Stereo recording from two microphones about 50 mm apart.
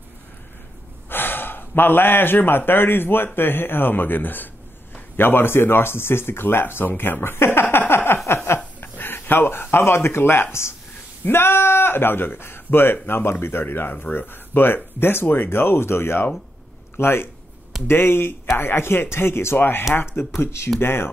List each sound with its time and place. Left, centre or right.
1.0 s speech: left
7.9 s a sound: left
8.8 s speech: left